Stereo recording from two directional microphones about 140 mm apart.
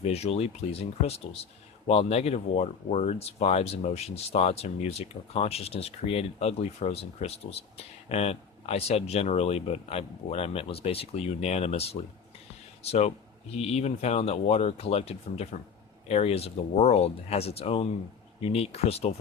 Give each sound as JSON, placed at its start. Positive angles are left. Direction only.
{"t": 0.0, "sound": "speech", "side_deg": 50}